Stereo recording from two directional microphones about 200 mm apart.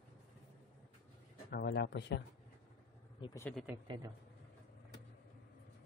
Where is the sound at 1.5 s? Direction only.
55° left (ahead or behind).